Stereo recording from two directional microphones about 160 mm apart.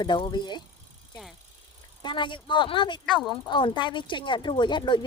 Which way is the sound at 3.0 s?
Centre (ahead or behind).